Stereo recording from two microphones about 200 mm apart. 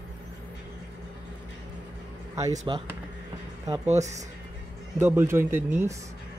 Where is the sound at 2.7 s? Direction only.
25° right (ahead or behind).